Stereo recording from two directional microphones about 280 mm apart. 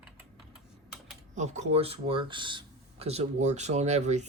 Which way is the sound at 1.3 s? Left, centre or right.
Right.